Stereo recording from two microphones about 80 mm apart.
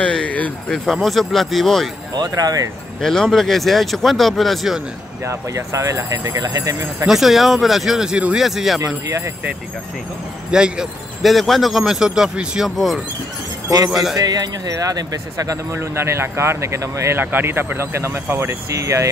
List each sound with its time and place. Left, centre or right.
0.0 s speech: centre
1.0 s speech: centre
2.1 s speech: right
3.0 s speech: centre
5.2 s speech: right
7.1 s speech: centre
8.8 s speech: right
10.5 s speech: centre
14.1 s speech: right
17.2 s speech: right
18.7 s speech: right